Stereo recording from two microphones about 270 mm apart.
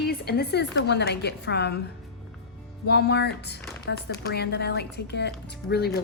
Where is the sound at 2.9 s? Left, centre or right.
Left.